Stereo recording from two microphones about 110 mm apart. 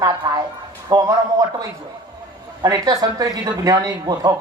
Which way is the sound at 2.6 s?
35° right (ahead or behind).